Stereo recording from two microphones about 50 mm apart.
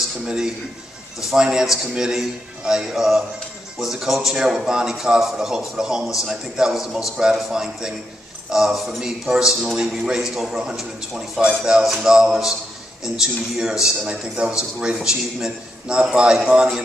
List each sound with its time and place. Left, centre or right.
0.2 s a man's voice: centre